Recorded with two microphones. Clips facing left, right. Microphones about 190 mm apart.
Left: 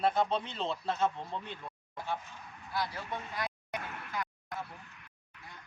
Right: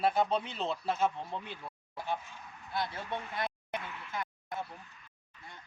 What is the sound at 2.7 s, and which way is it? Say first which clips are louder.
Speech: right 1 dB; 25° right (ahead or behind).